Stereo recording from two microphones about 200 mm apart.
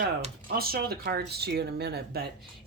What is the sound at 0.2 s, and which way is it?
Speech, 45° right (ahead or behind).